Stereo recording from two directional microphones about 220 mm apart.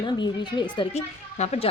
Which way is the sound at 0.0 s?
20° left (ahead or behind).